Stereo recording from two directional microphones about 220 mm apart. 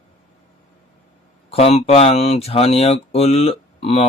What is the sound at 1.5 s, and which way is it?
Speech, 25° left (ahead or behind).